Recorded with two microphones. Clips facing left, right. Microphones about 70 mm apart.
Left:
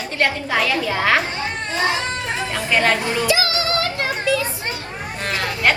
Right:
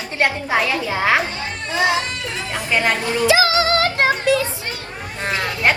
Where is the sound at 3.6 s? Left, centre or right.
Right.